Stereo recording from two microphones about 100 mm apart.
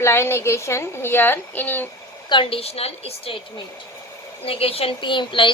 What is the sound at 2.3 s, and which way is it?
A woman's voice, 65° left (ahead or behind).